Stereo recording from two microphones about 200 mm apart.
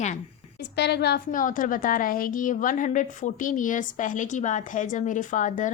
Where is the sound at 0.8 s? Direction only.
55° left (ahead or behind).